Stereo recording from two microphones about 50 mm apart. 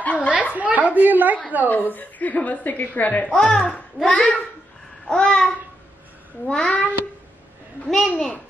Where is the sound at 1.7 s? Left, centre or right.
Left.